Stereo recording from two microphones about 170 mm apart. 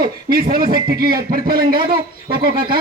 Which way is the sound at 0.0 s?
60° right (ahead or behind).